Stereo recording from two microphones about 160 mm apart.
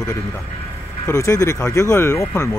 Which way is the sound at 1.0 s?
20° left (ahead or behind).